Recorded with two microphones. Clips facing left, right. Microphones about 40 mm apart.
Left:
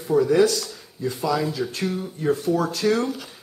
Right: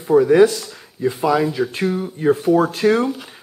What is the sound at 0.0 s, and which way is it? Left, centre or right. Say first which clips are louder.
A man's voice: right 6 dB; right.